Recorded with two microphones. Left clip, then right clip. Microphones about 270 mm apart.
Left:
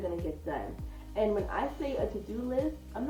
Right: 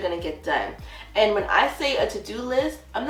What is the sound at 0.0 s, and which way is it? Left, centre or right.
A woman's voice, centre.